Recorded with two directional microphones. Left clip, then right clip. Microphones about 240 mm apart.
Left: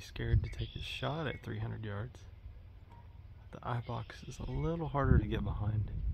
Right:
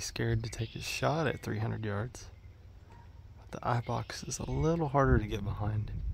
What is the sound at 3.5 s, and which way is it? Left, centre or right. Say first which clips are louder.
Speech: right 7 dB; right.